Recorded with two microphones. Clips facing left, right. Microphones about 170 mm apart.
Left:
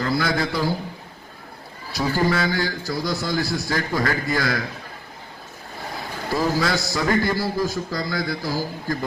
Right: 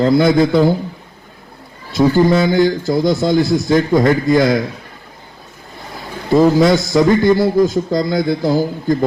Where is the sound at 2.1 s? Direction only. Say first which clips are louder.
Right 8 dB; 20° right (ahead or behind).